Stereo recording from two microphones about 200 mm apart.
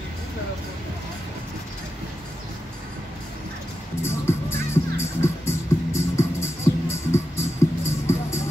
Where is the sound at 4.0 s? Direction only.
10° left (ahead or behind).